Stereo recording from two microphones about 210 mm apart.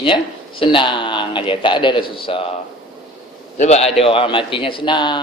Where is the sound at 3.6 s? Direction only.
30° left (ahead or behind).